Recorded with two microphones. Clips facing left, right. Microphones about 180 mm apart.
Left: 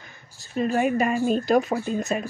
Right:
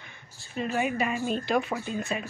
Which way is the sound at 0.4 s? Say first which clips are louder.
Left 6 dB; 40° left (ahead or behind).